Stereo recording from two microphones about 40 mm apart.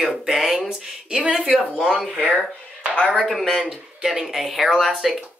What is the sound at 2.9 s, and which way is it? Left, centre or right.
Speech, left.